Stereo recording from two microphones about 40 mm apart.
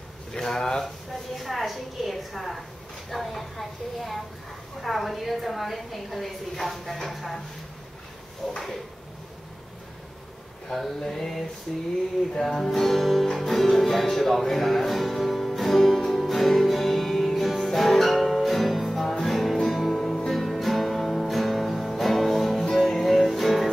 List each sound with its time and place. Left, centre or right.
0.3 s speech: centre
0.8 s a sound: centre
3.1 s a woman's voice: centre
8.4 s speech: centre
11.0 s speech: centre
12.2 s a woman's voice: centre
13.7 s music: centre